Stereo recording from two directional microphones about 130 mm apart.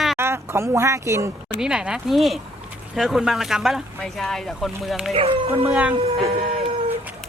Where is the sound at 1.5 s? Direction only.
5° right (ahead or behind).